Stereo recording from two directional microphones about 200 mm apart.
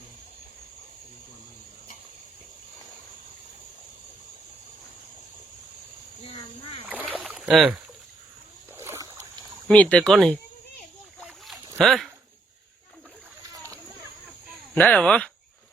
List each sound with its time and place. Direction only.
6.2 s cricket: 30° left (ahead or behind)
6.8 s boat: 5° right (ahead or behind)
8.7 s boat: 15° right (ahead or behind)
9.6 s speech: 5° left (ahead or behind)
11.2 s boat: centre (ahead or behind)
11.8 s speech: centre (ahead or behind)
14.5 s speech: 5° left (ahead or behind)